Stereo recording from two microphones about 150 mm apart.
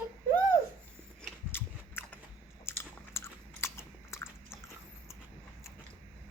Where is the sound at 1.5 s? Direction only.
15° left (ahead or behind).